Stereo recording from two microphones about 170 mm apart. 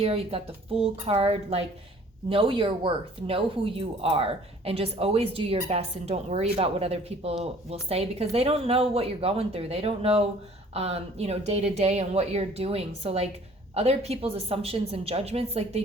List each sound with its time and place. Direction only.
0.0 s speech: 35° right (ahead or behind)